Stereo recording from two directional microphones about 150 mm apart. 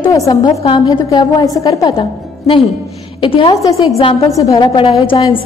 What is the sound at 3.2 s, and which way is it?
A woman's voice, 35° left (ahead or behind).